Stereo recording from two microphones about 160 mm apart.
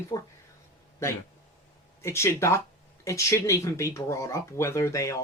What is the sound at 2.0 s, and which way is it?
Speech, 15° left (ahead or behind).